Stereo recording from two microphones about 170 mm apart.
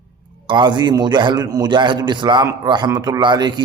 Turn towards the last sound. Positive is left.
turn(degrees=-25)  # may be behind; listen again after turning